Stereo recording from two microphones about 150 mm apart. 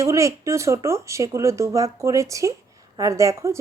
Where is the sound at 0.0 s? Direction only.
20° right (ahead or behind).